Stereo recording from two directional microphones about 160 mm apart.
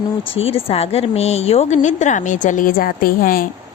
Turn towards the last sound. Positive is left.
turn(degrees=65)  # may be behind; listen again after turning